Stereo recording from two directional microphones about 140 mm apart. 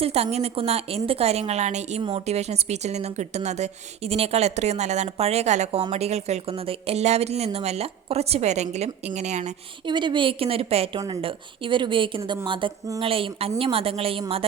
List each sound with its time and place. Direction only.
0.0 s a woman's voice: 45° right (ahead or behind)
2.0 s a woman's voice: 40° right (ahead or behind)
9.8 s a woman's voice: 35° right (ahead or behind)